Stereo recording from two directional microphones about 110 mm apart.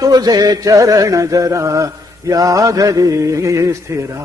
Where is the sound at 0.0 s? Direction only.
35° right (ahead or behind).